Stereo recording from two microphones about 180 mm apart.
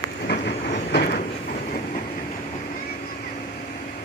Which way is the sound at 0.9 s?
55° left (ahead or behind).